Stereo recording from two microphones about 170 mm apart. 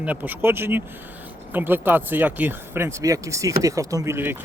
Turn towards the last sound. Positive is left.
turn(degrees=-15)  # may be behind; listen again after turning